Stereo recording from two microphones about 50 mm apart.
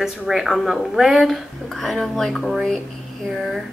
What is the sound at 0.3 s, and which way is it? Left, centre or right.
Speech, centre.